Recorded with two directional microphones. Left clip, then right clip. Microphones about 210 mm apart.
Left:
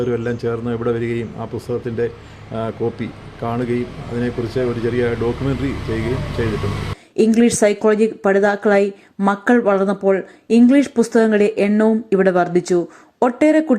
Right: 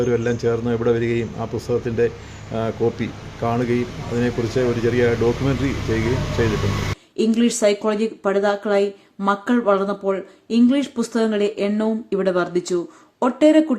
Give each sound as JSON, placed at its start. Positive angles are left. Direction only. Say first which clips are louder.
{"t": 0.0, "sound": "a man's voice", "louder": "right 1 dB", "side_deg": 5}
{"t": 7.2, "sound": "speech", "louder": "left 5 dB", "side_deg": 20}